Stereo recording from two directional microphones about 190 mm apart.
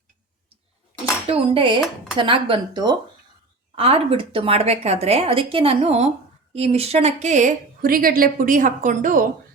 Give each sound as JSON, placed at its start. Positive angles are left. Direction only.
{"t": 1.3, "sound": "a woman's voice", "side_deg": -30}